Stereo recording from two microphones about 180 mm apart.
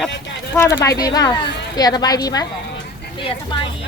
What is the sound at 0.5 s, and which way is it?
A woman's voice, 15° left (ahead or behind).